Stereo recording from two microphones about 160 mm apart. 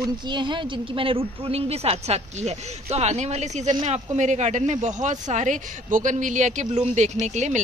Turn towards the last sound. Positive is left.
turn(degrees=-45)  # may be behind; listen again after turning